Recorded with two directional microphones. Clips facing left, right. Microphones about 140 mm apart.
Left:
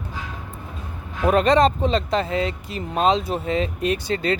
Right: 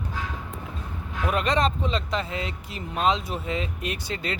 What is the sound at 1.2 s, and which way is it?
Speech, 35° left (ahead or behind).